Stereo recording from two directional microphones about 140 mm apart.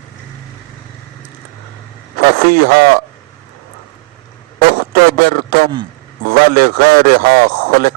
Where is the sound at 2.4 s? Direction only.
90° right.